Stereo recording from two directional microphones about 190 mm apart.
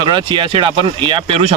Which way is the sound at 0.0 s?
25° right (ahead or behind).